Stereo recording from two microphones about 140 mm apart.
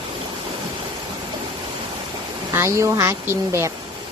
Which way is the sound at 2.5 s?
20° right (ahead or behind).